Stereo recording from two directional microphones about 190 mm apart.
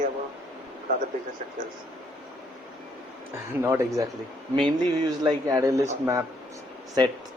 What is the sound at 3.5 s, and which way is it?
Speech, 15° right (ahead or behind).